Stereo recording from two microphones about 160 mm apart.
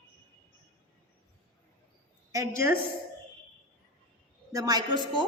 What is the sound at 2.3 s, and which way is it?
Speech, 20° right (ahead or behind).